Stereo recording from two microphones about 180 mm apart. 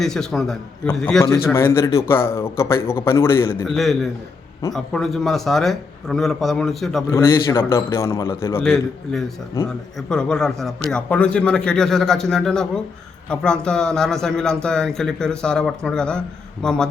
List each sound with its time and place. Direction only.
0.0 s a man's voice: 5° left (ahead or behind)
3.7 s a man's voice: centre (ahead or behind)
7.1 s a man's voice: 15° left (ahead or behind)
8.6 s a man's voice: centre (ahead or behind)